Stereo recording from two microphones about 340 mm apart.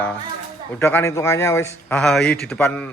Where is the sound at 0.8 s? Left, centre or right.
Centre.